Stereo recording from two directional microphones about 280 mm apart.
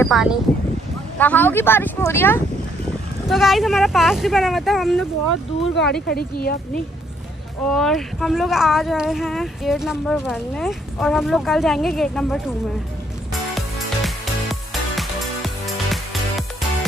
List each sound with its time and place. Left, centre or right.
0.0 s speech: centre
6.0 s speech: left
7.7 s speech: centre
13.3 s music: centre